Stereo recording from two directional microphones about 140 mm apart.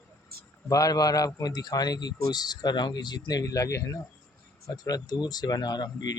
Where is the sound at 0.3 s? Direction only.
90° right.